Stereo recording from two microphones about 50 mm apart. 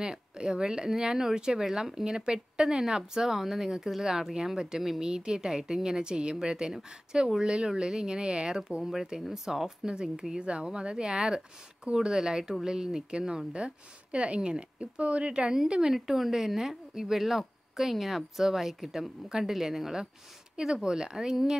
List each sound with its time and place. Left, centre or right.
0.0 s speech: centre
13.5 s speech: right